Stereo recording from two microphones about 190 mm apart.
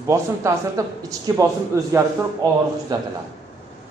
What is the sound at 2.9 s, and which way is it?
Speech, 20° right (ahead or behind).